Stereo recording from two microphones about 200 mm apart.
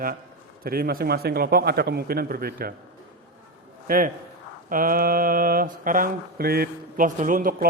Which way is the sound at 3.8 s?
45° right (ahead or behind).